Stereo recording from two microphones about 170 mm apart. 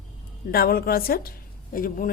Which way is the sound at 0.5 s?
65° left (ahead or behind).